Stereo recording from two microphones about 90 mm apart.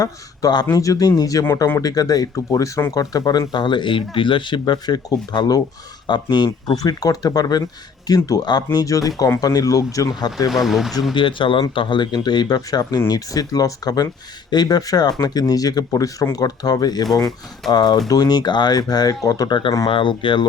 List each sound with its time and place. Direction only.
0.0 s speech: 45° left (ahead or behind)
10.5 s speech: centre (ahead or behind)
11.1 s speech: 70° left (ahead or behind); by 19.5 s 40° left (ahead or behind)
19.5 s speech: 65° left (ahead or behind)